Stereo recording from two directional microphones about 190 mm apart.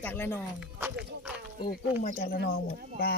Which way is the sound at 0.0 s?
10° left (ahead or behind).